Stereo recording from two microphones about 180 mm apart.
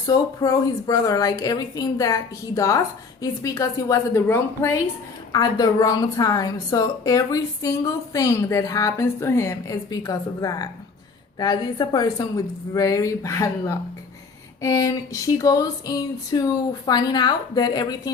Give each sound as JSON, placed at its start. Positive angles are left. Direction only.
{"t": 0.1, "sound": "a woman's voice", "side_deg": 20}